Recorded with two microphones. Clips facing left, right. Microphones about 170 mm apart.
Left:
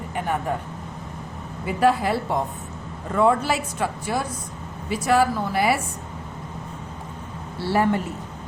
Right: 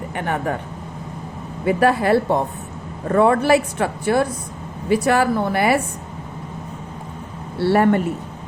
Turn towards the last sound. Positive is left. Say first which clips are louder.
# right 6 dB
turn(degrees=-60)  # may be behind; listen again after turning